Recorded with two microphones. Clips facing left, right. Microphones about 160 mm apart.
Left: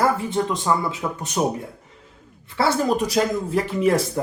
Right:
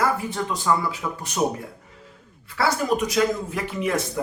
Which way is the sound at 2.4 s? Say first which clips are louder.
Left 2 dB; 30° left (ahead or behind).